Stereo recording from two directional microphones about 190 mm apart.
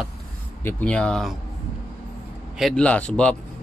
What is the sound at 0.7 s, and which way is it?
Speech, 10° left (ahead or behind).